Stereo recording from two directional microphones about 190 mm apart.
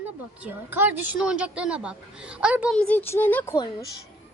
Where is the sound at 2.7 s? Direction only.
5° left (ahead or behind).